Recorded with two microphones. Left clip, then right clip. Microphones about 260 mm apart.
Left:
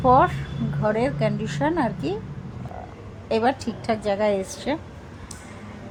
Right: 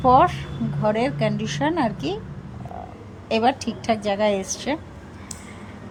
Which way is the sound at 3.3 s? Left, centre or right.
Centre.